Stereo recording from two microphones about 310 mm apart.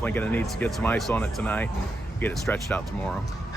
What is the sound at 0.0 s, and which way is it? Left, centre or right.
A man's voice, centre.